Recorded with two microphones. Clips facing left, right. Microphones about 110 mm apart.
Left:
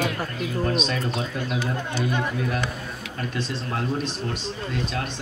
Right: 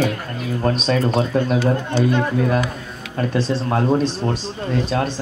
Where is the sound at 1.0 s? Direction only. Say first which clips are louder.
Right 10 dB; 45° right (ahead or behind).